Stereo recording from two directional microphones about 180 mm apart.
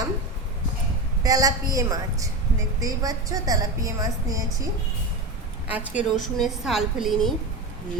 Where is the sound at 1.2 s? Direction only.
20° right (ahead or behind).